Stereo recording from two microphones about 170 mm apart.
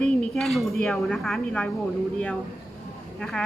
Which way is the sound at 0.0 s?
Centre (ahead or behind).